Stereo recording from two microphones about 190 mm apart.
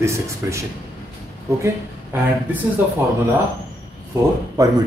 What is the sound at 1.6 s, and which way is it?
Speech, 10° right (ahead or behind).